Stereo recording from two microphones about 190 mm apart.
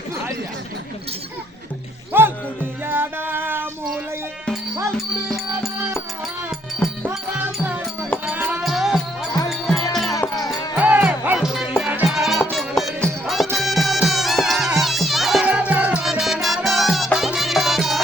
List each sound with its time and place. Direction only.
2.1 s music: 10° right (ahead or behind)
8.3 s music: 10° right (ahead or behind)
10.2 s music: 20° left (ahead or behind)
10.8 s music: 10° right (ahead or behind)